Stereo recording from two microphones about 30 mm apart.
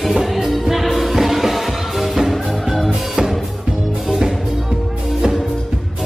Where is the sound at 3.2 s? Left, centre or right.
Right.